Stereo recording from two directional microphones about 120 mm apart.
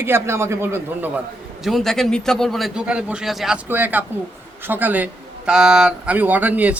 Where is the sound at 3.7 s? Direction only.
15° right (ahead or behind).